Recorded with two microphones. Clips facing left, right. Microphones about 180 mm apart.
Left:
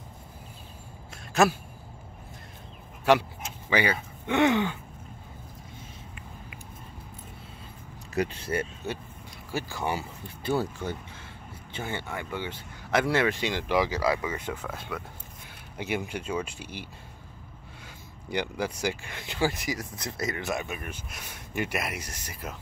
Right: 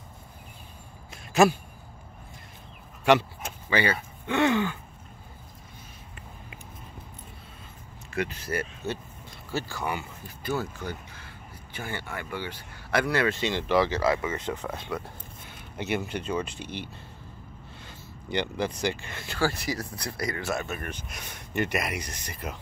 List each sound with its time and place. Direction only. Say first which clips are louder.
1.3 s speech: right 3 dB; centre (ahead or behind)
3.7 s speech: even; 15° left (ahead or behind)
8.1 s speech: left 2 dB; 35° left (ahead or behind)
8.8 s speech: right 1 dB; 15° left (ahead or behind)
9.8 s speech: left 1 dB; 30° left (ahead or behind); by 14.6 s 10° left (ahead or behind)
15.8 s speech: right 1 dB; 10° left (ahead or behind)
18.3 s speech: right 1 dB; 5° left (ahead or behind)